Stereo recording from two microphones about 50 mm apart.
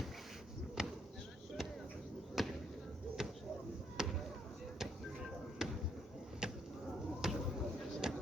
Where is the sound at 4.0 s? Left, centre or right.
Centre.